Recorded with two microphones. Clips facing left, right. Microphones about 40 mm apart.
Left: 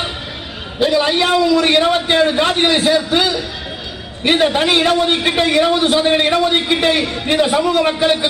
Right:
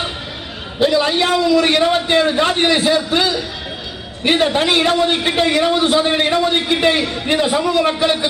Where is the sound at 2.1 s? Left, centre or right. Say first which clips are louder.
Left 1 dB; left.